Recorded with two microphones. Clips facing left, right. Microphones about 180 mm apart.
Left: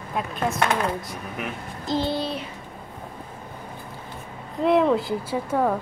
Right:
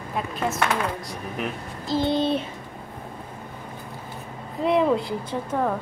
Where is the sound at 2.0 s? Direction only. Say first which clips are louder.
Right 7 dB; 20° right (ahead or behind).